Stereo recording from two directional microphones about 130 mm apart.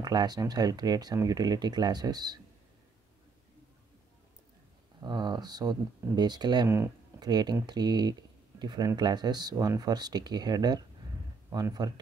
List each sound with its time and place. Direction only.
0.0 s speech: 30° right (ahead or behind)
5.0 s speech: 35° right (ahead or behind)